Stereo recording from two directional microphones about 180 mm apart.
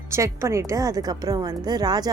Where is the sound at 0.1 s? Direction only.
15° right (ahead or behind).